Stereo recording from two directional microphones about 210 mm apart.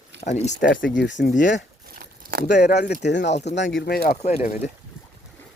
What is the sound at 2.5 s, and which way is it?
Speech, 50° left (ahead or behind).